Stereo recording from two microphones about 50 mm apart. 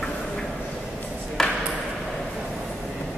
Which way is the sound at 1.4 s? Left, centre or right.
Centre.